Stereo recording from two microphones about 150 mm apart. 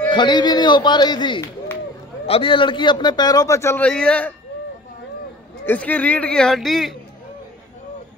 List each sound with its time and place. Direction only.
0.1 s a man's voice: 30° left (ahead or behind); by 4.3 s 5° left (ahead or behind)
5.7 s speech: 10° left (ahead or behind)